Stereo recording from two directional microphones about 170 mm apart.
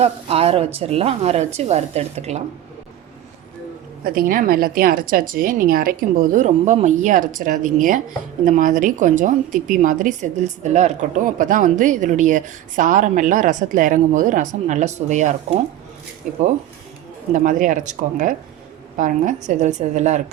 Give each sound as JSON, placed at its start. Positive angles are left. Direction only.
{"t": 0.0, "sound": "speech", "side_deg": -35}
{"t": 4.0, "sound": "a woman's voice", "side_deg": -60}
{"t": 17.3, "sound": "a woman's voice", "side_deg": -50}